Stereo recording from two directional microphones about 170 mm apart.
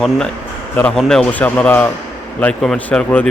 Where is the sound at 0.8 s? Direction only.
5° left (ahead or behind).